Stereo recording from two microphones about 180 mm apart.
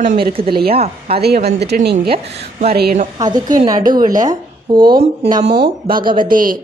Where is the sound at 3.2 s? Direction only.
20° right (ahead or behind).